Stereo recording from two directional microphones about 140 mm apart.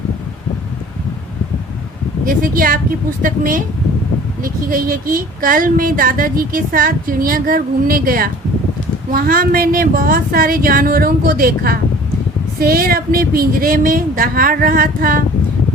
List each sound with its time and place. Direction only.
2.2 s speech: 90° right
3.2 s speech: 75° right (ahead or behind)
4.4 s speech: 90° right